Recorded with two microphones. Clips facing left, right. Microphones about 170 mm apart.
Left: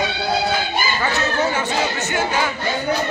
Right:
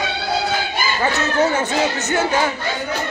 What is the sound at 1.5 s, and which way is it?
Music, 40° right (ahead or behind).